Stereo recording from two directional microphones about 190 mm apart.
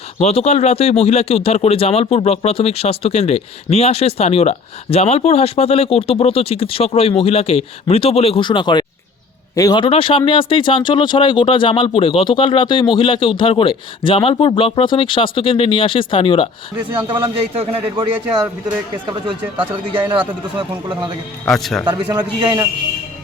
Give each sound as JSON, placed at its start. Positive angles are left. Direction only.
{"t": 0.2, "sound": "speech", "side_deg": 35}
{"t": 17.1, "sound": "a man's voice", "side_deg": -25}
{"t": 20.6, "sound": "a man's voice", "side_deg": -25}
{"t": 21.4, "sound": "speech", "side_deg": 0}
{"t": 22.1, "sound": "a man's voice", "side_deg": -20}